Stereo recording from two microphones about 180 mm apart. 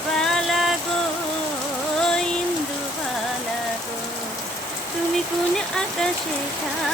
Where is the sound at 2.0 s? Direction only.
5° left (ahead or behind).